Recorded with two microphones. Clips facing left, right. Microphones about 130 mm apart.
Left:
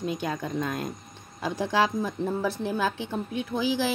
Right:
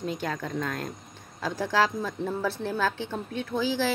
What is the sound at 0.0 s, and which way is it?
A woman's voice, 15° left (ahead or behind).